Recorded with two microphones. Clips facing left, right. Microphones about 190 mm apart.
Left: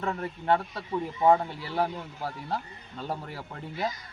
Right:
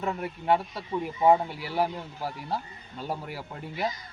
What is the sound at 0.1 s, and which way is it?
A man's voice, 10° right (ahead or behind).